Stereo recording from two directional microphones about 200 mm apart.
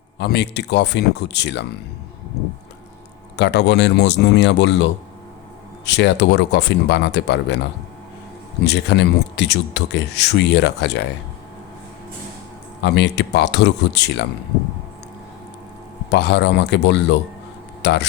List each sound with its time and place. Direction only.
0.2 s speech: 55° left (ahead or behind)
3.3 s speech: 60° left (ahead or behind)
8.6 s speech: 60° left (ahead or behind)
12.8 s speech: 60° left (ahead or behind)
16.0 s speech: 55° left (ahead or behind)